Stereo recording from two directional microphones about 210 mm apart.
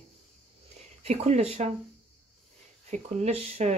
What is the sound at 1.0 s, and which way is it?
Speech, 30° right (ahead or behind).